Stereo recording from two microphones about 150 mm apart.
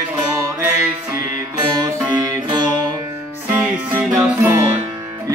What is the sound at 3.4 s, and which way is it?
Music, 10° right (ahead or behind).